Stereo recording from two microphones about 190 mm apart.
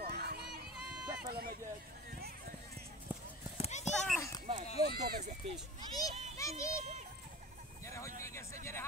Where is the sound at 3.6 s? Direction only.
35° left (ahead or behind).